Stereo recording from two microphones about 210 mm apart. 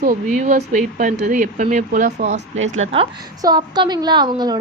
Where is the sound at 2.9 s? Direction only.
25° right (ahead or behind).